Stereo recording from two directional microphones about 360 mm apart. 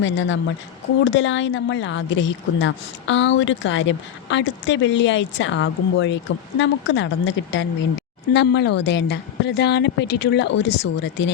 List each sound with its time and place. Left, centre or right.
0.0 s a woman's voice: left